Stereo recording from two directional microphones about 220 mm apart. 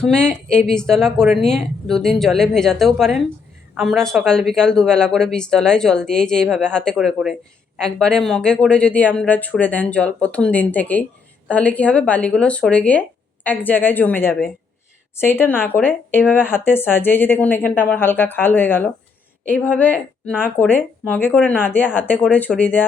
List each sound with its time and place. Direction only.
0.0 s speech: 5° left (ahead or behind)